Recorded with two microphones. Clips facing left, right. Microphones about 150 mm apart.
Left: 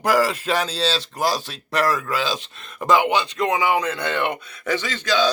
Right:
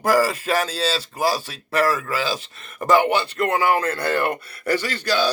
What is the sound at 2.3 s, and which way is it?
Speech, 15° left (ahead or behind).